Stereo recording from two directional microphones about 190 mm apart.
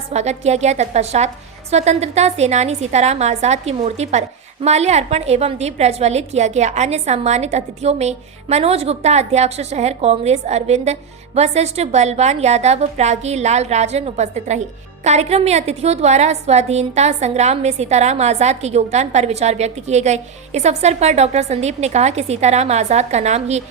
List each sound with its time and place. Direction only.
0.1 s a woman's voice: 35° right (ahead or behind)